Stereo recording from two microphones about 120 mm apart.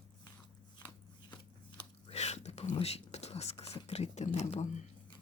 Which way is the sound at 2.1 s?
65° left (ahead or behind).